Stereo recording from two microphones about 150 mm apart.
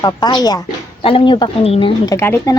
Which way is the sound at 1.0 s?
35° left (ahead or behind).